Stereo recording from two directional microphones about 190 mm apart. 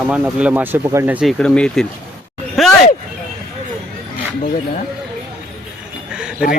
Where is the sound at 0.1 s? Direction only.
5° right (ahead or behind).